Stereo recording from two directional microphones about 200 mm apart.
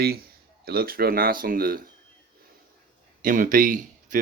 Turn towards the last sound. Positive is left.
turn(degrees=-40)  # may be behind; listen again after turning